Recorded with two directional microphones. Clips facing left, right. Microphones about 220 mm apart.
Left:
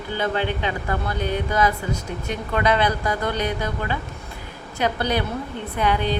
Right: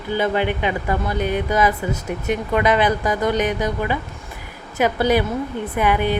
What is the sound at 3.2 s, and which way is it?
Speech, 15° right (ahead or behind).